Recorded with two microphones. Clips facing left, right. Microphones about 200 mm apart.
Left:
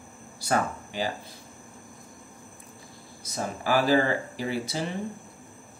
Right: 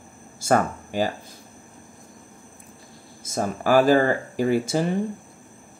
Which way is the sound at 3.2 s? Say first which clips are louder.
Right 6 dB; 50° right (ahead or behind).